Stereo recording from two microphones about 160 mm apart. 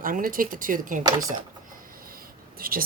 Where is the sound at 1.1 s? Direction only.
25° right (ahead or behind).